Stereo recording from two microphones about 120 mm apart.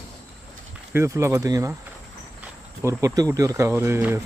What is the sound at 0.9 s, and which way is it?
Speech, 25° right (ahead or behind).